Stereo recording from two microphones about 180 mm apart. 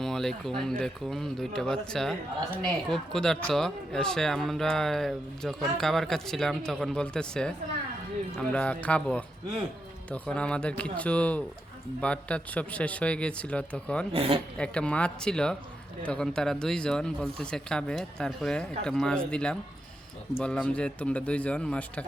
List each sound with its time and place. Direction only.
0.0 s speech: centre (ahead or behind)
14.1 s speech: 30° right (ahead or behind)
14.6 s speech: 5° left (ahead or behind)